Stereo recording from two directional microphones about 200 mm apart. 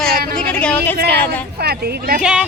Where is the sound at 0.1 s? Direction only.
50° right (ahead or behind).